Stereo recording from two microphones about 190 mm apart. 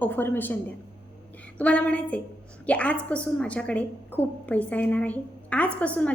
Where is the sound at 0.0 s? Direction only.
10° left (ahead or behind).